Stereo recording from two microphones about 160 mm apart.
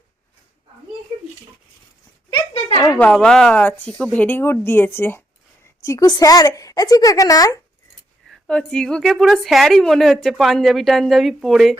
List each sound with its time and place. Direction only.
3.0 s speech: 5° left (ahead or behind); by 7.6 s 20° left (ahead or behind)
8.3 s a woman's voice: 5° left (ahead or behind)